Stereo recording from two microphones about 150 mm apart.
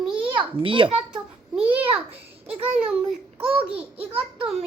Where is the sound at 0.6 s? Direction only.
35° right (ahead or behind).